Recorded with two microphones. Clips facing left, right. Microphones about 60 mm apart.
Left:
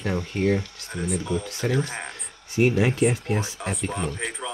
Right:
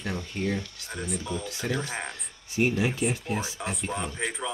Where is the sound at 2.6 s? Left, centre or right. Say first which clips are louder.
Left 5 dB; left.